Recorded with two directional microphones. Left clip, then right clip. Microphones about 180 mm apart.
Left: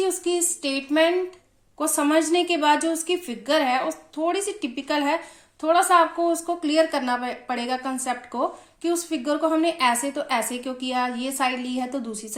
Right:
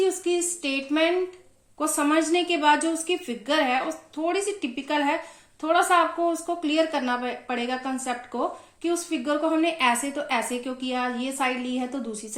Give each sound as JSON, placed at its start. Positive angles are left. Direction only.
{"t": 0.0, "sound": "a woman's voice", "side_deg": 35}